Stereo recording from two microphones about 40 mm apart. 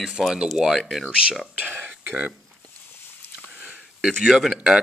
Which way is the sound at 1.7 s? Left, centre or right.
Right.